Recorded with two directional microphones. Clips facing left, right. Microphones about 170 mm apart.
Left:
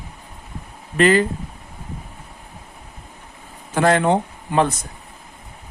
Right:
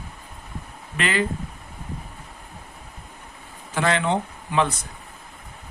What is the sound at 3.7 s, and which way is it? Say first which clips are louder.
Speech: left 6 dB; 45° left (ahead or behind).